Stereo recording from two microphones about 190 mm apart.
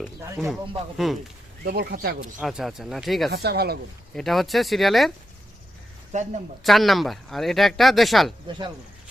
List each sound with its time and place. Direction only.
0.9 s speech: centre (ahead or behind)
1.6 s speech: 55° right (ahead or behind)
2.4 s speech: centre (ahead or behind)
3.3 s speech: 55° right (ahead or behind)
4.1 s speech: centre (ahead or behind)
6.1 s speech: 40° right (ahead or behind)
6.7 s speech: centre (ahead or behind)
8.4 s speech: 25° right (ahead or behind)